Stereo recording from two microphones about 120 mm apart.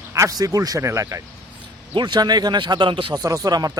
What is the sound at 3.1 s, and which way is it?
Speech, 30° right (ahead or behind).